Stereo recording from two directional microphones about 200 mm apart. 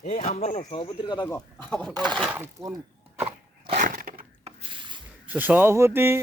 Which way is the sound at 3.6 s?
40° right (ahead or behind).